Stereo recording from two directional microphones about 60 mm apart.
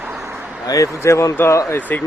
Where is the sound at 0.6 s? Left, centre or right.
Left.